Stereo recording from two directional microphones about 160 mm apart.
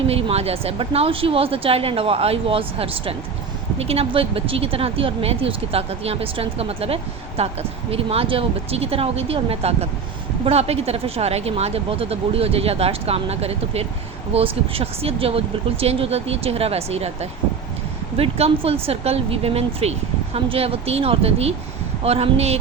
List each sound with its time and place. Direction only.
0.1 s speech: 40° right (ahead or behind)